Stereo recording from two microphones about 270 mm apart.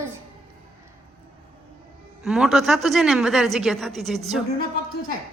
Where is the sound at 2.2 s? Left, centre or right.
Centre.